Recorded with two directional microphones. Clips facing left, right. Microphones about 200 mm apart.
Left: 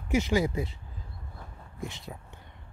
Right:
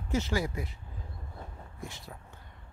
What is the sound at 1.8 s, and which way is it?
Speech, 20° left (ahead or behind).